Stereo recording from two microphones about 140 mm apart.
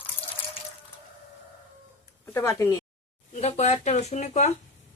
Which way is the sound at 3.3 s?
55° left (ahead or behind).